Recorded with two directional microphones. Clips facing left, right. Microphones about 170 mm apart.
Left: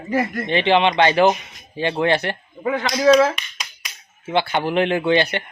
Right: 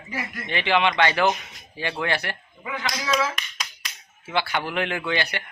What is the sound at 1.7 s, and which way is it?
Speech, 25° left (ahead or behind).